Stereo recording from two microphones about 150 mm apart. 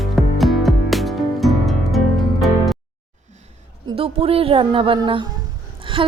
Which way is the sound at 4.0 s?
40° right (ahead or behind).